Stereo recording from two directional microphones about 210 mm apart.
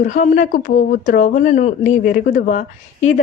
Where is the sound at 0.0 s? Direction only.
35° left (ahead or behind).